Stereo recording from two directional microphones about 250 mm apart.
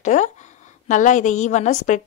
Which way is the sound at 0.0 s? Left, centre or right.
Left.